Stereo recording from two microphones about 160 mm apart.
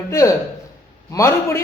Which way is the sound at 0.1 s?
20° left (ahead or behind).